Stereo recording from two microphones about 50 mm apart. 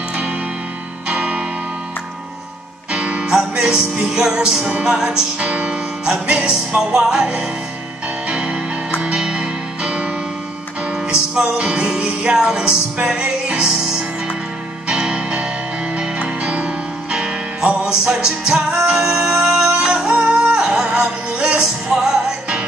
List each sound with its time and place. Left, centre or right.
0.1 s music: right
2.9 s music: right